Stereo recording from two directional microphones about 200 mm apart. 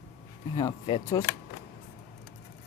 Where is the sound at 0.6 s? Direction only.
20° left (ahead or behind).